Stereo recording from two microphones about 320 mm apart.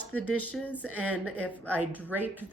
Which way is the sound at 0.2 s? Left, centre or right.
Right.